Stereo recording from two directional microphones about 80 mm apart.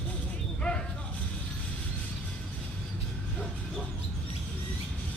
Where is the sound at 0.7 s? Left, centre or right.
Centre.